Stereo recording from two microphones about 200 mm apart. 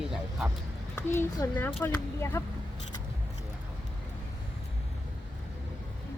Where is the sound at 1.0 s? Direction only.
10° left (ahead or behind).